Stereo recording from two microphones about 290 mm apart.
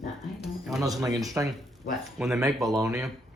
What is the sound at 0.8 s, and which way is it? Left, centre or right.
Speech, centre.